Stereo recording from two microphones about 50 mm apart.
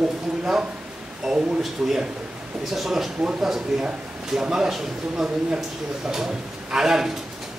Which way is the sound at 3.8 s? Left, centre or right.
Centre.